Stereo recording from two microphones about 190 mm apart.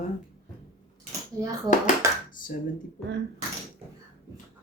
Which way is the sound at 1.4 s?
20° right (ahead or behind).